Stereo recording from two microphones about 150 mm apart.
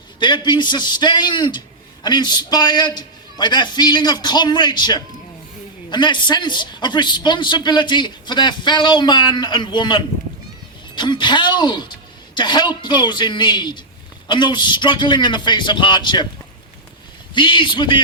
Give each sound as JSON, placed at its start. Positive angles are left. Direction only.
{"t": 0.2, "sound": "a man's voice", "side_deg": 30}
{"t": 17.3, "sound": "a man's voice", "side_deg": 35}